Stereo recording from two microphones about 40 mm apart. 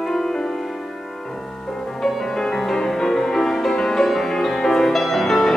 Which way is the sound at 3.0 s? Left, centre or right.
Centre.